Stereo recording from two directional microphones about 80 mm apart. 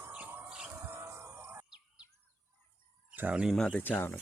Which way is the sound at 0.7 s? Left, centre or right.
Right.